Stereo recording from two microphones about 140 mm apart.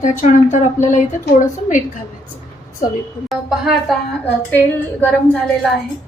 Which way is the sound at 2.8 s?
75° left (ahead or behind).